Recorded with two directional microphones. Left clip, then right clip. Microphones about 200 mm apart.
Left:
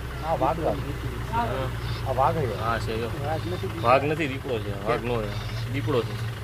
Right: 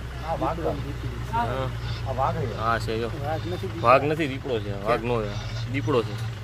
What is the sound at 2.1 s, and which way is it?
Speech, 40° left (ahead or behind).